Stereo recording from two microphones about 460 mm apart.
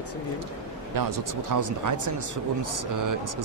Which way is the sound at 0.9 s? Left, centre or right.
Right.